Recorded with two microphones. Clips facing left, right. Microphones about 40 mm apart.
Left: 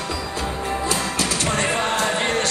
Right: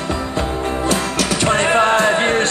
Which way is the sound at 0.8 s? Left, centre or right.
Right.